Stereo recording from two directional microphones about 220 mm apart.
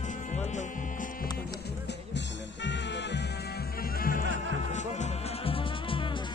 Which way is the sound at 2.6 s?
55° left (ahead or behind).